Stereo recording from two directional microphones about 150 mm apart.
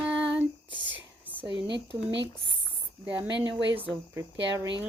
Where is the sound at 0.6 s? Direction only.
30° left (ahead or behind).